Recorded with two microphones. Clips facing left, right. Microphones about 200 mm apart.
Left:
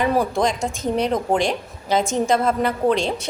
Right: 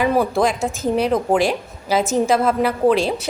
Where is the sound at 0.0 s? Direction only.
5° right (ahead or behind).